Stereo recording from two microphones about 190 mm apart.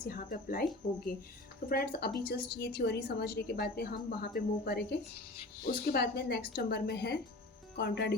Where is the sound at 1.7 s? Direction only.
50° left (ahead or behind).